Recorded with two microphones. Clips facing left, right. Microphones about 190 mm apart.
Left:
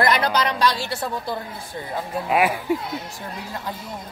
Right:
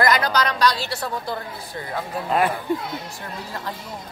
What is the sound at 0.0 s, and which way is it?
Speech, 30° left (ahead or behind).